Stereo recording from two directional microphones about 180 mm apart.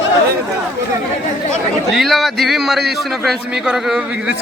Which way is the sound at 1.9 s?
Centre (ahead or behind).